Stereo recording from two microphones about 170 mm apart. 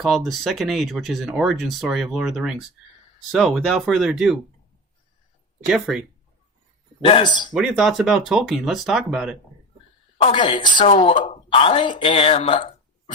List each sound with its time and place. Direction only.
0.0 s speech: centre (ahead or behind)
5.6 s speech: centre (ahead or behind)
7.0 s a woman's voice: 30° left (ahead or behind)
7.5 s speech: centre (ahead or behind)
10.2 s a woman's voice: 30° left (ahead or behind)
10.8 s speech: 40° left (ahead or behind)